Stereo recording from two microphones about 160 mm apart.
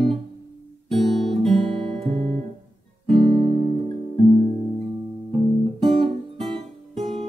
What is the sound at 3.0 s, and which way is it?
Music, 40° right (ahead or behind).